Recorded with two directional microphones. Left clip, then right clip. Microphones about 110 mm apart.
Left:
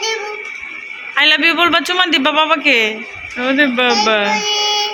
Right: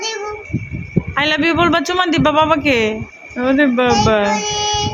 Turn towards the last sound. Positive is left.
turn(degrees=-20)  # may be behind; listen again after turning